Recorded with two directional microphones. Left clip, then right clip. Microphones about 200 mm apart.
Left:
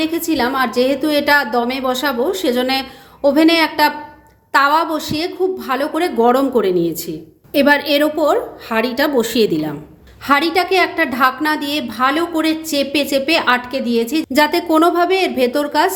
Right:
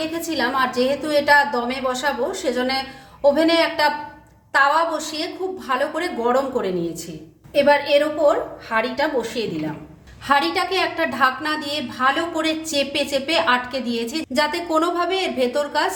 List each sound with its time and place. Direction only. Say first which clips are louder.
0.0 s a woman's voice: left 5 dB; 35° left (ahead or behind)
7.5 s a woman's voice: left 2 dB; 55° left (ahead or behind)
10.2 s a woman's voice: left 4 dB; 35° left (ahead or behind)